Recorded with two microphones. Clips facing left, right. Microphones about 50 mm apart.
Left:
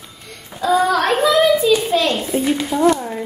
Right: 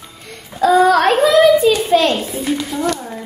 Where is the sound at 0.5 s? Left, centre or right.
Right.